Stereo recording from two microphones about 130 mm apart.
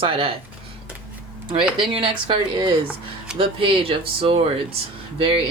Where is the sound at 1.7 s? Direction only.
40° right (ahead or behind).